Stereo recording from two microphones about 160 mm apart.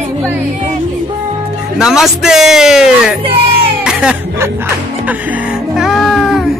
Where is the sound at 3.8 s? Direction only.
5° right (ahead or behind).